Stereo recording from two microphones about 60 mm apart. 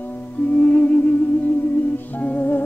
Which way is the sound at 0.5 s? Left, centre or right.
Left.